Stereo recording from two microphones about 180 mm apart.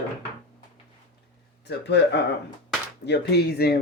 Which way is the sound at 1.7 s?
70° left (ahead or behind).